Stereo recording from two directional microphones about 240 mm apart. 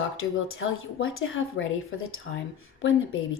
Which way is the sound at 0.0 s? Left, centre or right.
Left.